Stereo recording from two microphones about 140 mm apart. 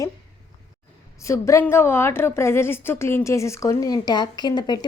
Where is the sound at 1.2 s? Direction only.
20° left (ahead or behind).